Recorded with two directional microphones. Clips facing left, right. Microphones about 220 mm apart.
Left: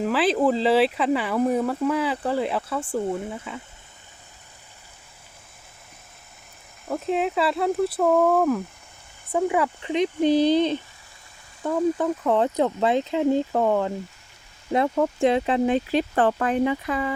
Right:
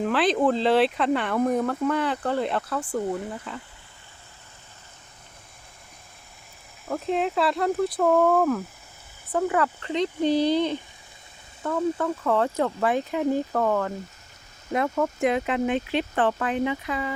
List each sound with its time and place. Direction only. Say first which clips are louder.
0.0 s speech: left 1 dB; 5° left (ahead or behind)
6.8 s speech: left 1 dB; centre (ahead or behind)
9.3 s speech: left 1 dB; 10° left (ahead or behind); by 17.2 s 45° left (ahead or behind)